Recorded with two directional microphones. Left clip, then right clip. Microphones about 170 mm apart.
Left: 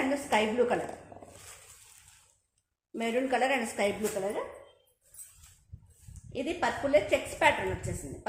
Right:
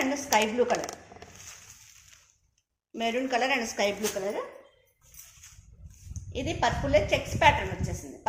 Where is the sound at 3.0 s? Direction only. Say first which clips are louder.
Right 1 dB; 20° left (ahead or behind).